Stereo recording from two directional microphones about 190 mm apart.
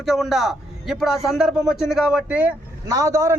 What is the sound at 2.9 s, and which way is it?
Speech, 15° right (ahead or behind).